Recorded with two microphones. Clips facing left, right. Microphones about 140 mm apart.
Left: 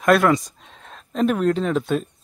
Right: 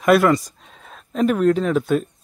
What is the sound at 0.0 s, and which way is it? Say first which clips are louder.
Speech: right 2 dB; 5° right (ahead or behind).